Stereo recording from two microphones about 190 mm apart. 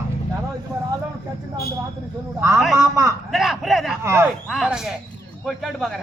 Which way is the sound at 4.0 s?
10° right (ahead or behind).